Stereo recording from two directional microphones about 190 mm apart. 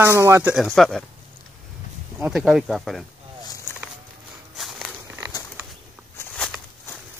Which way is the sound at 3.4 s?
15° left (ahead or behind).